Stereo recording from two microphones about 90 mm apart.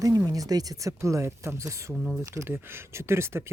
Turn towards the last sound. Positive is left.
turn(degrees=-30)  # may be behind; listen again after turning